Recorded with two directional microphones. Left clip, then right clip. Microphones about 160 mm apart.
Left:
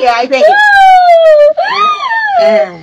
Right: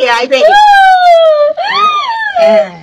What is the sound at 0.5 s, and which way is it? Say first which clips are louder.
Police car: even; 15° left (ahead or behind).